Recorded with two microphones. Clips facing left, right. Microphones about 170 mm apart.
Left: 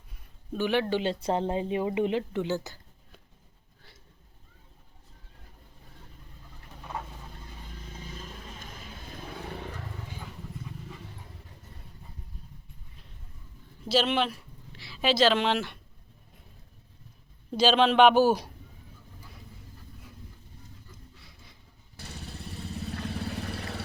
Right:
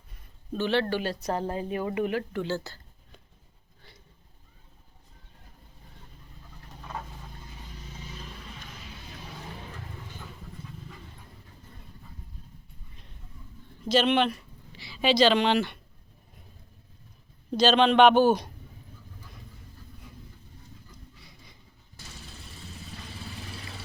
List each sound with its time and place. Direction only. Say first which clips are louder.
0.1 s speech: right 1 dB; 10° left (ahead or behind)
8.1 s vehicle: even; 45° left (ahead or behind)
13.8 s speech: right 3 dB; 5° left (ahead or behind)
17.5 s a man's voice: right 1 dB; 5° left (ahead or behind)
21.2 s pant: right 2 dB; centre (ahead or behind)
23.0 s vehicle: left 8 dB; 60° left (ahead or behind)